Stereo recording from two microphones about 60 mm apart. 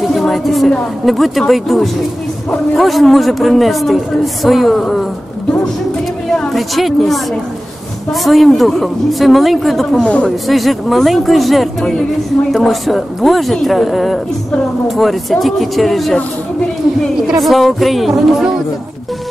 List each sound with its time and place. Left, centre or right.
0.1 s music: centre
1.0 s a man's voice: centre
6.5 s a woman's voice: centre
10.0 s speech: left
10.5 s a man's voice: centre
17.4 s a man's voice: centre